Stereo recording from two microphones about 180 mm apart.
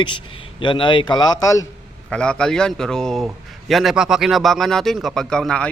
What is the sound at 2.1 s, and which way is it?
A man's voice, 5° left (ahead or behind).